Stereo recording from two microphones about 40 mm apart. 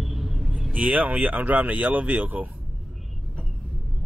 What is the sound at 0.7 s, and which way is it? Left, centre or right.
Speech, right.